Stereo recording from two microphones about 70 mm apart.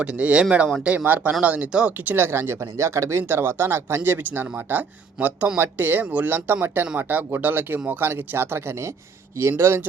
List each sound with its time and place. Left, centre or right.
0.0 s speech: centre
2.1 s speech: right